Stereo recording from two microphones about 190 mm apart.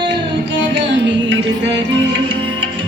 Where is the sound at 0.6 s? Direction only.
70° right (ahead or behind).